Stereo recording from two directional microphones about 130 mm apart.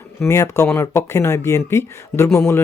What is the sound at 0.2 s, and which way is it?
Speech, 20° left (ahead or behind).